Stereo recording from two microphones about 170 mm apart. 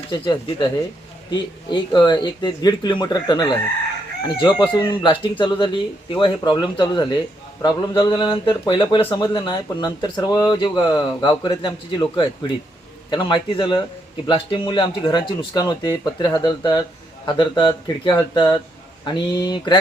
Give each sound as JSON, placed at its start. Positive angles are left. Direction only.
{"t": 0.1, "sound": "speech", "side_deg": 25}